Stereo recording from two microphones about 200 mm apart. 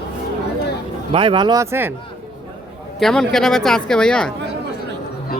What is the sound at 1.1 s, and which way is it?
Speech, 25° right (ahead or behind).